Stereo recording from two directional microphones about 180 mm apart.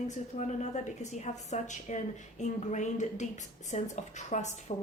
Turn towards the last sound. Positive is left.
turn(degrees=40)  # may be behind; listen again after turning